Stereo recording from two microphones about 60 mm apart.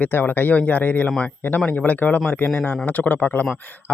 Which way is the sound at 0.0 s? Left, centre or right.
Left.